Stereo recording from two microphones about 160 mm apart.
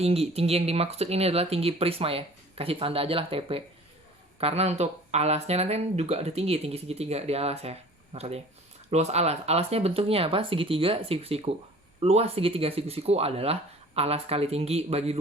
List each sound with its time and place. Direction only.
0.0 s speech: 40° right (ahead or behind)